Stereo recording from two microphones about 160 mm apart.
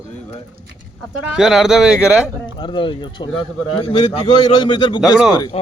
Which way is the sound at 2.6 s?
30° left (ahead or behind).